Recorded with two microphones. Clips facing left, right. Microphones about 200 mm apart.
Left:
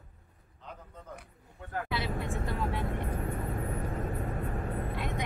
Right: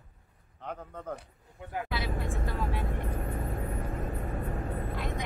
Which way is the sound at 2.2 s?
20° left (ahead or behind).